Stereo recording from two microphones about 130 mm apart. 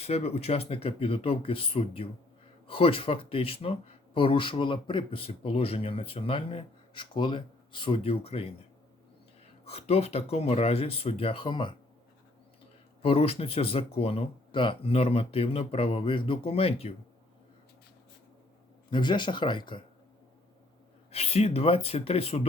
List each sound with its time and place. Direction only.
0.0 s speech: 55° left (ahead or behind)
9.6 s speech: 50° left (ahead or behind)
13.0 s speech: 50° left (ahead or behind)
18.9 s speech: 35° left (ahead or behind)
21.1 s speech: 50° left (ahead or behind)